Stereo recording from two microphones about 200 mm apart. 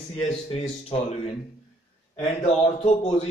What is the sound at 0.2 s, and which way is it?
A man's voice, 30° left (ahead or behind).